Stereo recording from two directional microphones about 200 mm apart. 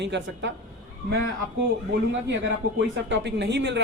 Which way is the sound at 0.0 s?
60° right (ahead or behind).